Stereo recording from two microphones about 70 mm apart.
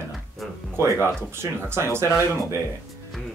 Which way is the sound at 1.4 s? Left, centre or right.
Right.